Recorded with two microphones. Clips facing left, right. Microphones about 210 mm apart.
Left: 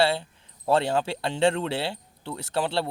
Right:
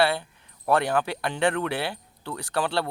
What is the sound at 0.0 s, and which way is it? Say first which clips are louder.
Speech: even; 25° left (ahead or behind).